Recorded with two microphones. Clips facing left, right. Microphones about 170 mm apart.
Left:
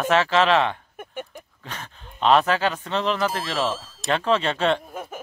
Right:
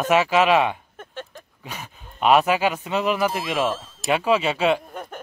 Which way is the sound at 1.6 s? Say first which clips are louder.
Right 2 dB; 10° right (ahead or behind).